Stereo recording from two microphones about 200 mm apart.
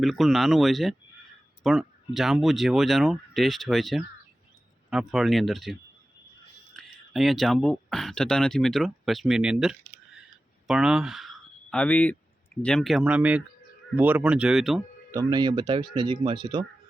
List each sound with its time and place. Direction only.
0.0 s speech: centre (ahead or behind)
6.7 s speech: centre (ahead or behind)
15.1 s speech: 20° right (ahead or behind)